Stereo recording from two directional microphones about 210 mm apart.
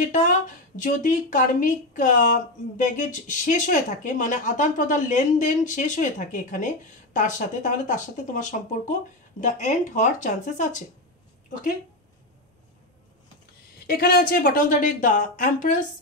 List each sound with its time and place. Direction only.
0.0 s speech: 35° left (ahead or behind)
13.8 s speech: 45° left (ahead or behind)